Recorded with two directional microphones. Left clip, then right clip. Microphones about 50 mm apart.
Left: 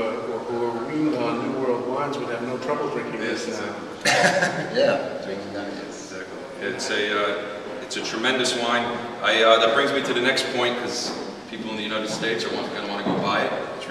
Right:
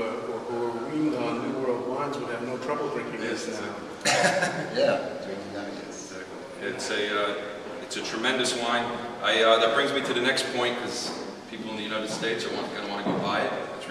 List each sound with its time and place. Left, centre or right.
1.1 s a sound: centre
4.0 s chuckle: centre
4.6 s a man's voice: centre
6.6 s a man's voice: centre
11.9 s speech: centre